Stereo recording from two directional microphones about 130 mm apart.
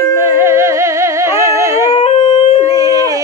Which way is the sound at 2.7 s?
25° right (ahead or behind).